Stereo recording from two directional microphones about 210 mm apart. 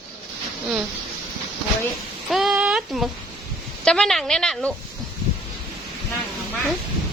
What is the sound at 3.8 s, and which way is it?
Speech, 5° left (ahead or behind).